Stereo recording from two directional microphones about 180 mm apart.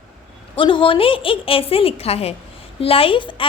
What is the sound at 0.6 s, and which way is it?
A woman's voice, 30° left (ahead or behind).